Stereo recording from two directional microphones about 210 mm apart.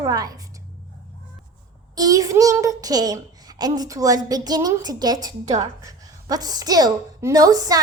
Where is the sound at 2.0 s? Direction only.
15° right (ahead or behind).